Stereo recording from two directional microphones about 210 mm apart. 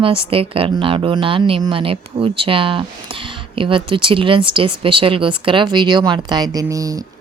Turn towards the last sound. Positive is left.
turn(degrees=-15)  # may be behind; listen again after turning